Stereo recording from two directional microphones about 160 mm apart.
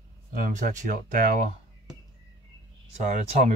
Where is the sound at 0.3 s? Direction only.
55° right (ahead or behind).